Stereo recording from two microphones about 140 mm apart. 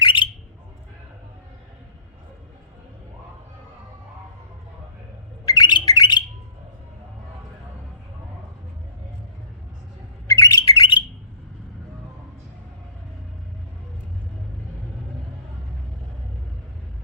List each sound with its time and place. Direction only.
0.0 s bird: 35° left (ahead or behind)
5.5 s bird: 30° left (ahead or behind)
10.2 s bird: 25° left (ahead or behind)